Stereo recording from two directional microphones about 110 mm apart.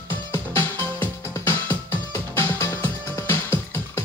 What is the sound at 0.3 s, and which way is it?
Music, 20° left (ahead or behind).